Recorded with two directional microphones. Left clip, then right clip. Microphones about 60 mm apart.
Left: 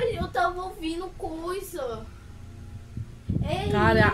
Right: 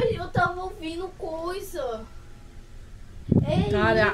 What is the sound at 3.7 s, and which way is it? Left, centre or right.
Speech, left.